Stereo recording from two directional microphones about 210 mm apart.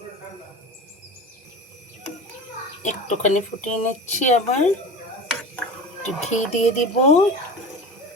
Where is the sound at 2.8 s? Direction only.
35° left (ahead or behind).